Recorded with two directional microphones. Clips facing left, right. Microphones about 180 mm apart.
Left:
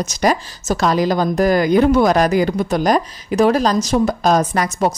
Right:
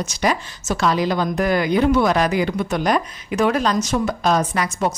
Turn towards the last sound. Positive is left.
turn(degrees=40)  # may be behind; listen again after turning